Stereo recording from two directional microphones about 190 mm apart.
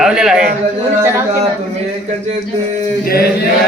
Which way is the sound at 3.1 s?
55° left (ahead or behind).